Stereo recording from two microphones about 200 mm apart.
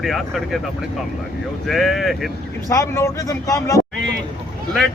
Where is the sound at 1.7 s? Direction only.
Centre (ahead or behind).